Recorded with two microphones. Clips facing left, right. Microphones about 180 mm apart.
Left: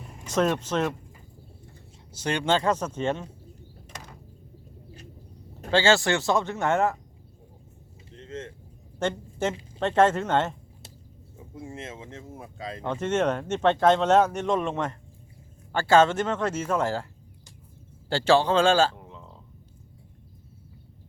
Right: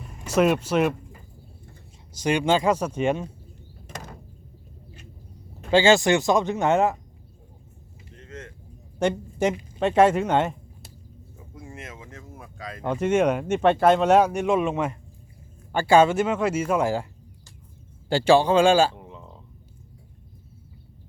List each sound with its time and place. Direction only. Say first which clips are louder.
0.3 s speech: right 4 dB; 10° right (ahead or behind)
2.1 s speech: right 4 dB; 10° right (ahead or behind)
3.8 s door: right 6 dB; 50° right (ahead or behind)
5.7 s speech: right 4 dB; 15° right (ahead or behind)
8.1 s a sound: left 4 dB; 25° left (ahead or behind)
9.0 s a woman's voice: right 4 dB; 15° right (ahead or behind)
11.3 s a sound: left 3 dB; 25° left (ahead or behind)
12.8 s speech: right 4 dB; 10° right (ahead or behind)
18.1 s speech: right 3 dB; 15° right (ahead or behind)